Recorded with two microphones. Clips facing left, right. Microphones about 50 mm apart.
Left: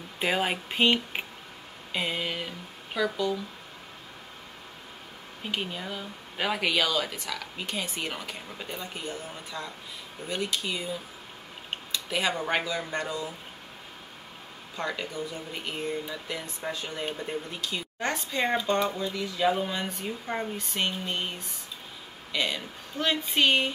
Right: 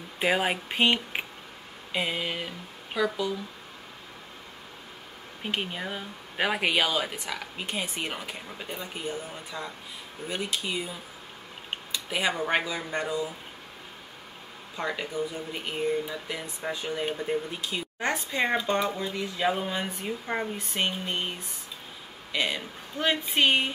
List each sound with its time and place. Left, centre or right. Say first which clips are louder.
0.2 s speech: right 2 dB; centre
5.4 s speech: right 1 dB; centre
12.1 s speech: right 1 dB; centre
14.8 s speech: right 2 dB; centre
19.4 s speech: left 1 dB; centre